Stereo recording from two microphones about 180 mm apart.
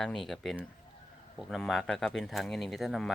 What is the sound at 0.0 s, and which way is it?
Speech, centre (ahead or behind).